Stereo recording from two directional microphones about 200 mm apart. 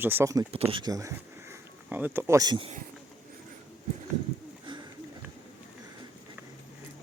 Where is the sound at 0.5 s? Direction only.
25° right (ahead or behind).